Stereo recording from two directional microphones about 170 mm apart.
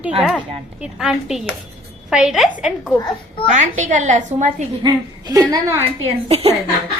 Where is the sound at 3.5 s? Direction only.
45° right (ahead or behind).